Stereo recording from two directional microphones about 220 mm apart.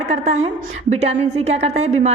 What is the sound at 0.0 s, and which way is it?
A woman's voice, 30° right (ahead or behind).